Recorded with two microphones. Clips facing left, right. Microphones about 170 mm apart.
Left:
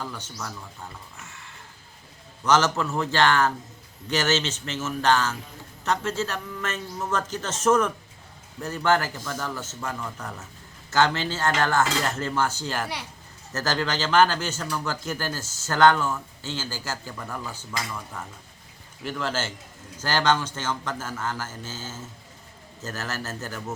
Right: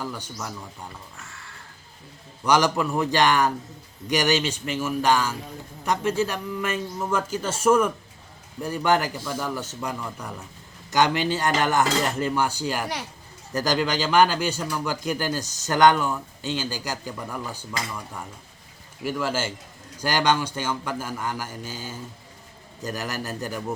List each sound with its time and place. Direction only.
0.0 s a man's voice: 10° right (ahead or behind)
1.2 s a sound: 20° left (ahead or behind)
2.4 s a man's voice: 15° right (ahead or behind)